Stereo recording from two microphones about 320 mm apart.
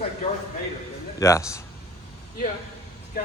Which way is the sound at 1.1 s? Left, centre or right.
Centre.